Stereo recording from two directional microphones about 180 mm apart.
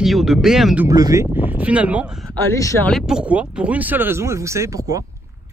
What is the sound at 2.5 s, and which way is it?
Speech, 15° left (ahead or behind).